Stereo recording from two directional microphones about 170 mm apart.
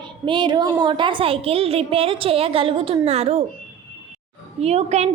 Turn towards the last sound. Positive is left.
turn(degrees=-40)  # may be behind; listen again after turning